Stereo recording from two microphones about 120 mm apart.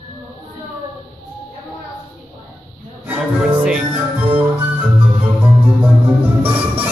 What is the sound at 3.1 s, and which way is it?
Speech, 10° right (ahead or behind).